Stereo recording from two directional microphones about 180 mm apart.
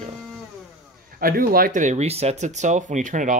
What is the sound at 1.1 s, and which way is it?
Speech, 55° right (ahead or behind).